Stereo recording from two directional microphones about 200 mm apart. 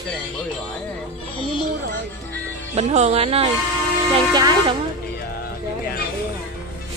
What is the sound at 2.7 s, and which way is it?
Speech, 30° right (ahead or behind).